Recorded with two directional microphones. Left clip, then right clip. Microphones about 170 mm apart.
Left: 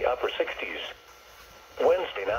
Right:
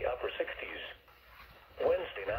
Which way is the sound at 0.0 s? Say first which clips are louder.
Left 8 dB; 35° left (ahead or behind).